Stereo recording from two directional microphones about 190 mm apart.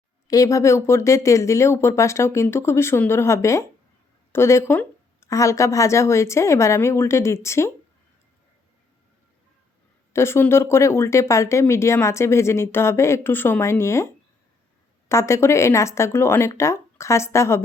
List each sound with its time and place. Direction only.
0.3 s speech: 15° left (ahead or behind)
10.1 s speech: 15° left (ahead or behind)
15.1 s speech: 15° left (ahead or behind)